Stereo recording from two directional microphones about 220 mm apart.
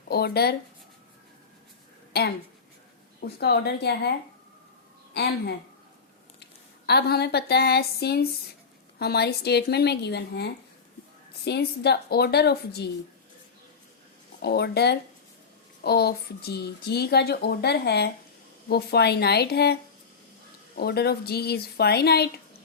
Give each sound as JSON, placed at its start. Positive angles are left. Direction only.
{"t": 0.1, "sound": "speech", "side_deg": 45}
{"t": 3.2, "sound": "speech", "side_deg": 45}
{"t": 5.1, "sound": "speech", "side_deg": 50}
{"t": 14.4, "sound": "speech", "side_deg": 50}